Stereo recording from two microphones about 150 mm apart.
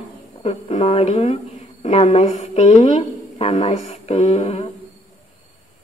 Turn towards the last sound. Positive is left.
turn(degrees=45)  # may be behind; listen again after turning